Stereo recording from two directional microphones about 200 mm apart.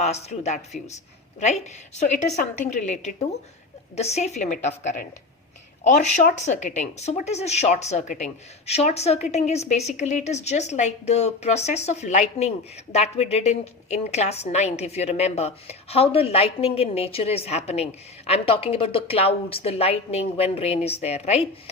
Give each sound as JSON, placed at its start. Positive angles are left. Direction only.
{"t": 0.0, "sound": "a woman's voice", "side_deg": 35}